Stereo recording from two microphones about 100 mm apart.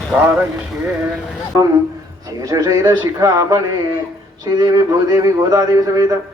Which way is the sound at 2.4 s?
35° right (ahead or behind).